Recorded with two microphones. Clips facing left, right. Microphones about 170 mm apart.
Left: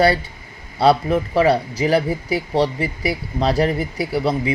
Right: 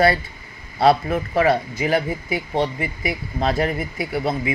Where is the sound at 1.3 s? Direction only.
30° left (ahead or behind).